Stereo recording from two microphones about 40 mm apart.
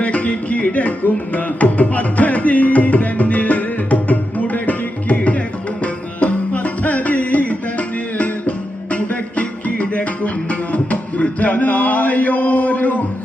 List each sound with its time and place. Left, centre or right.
0.0 s music: left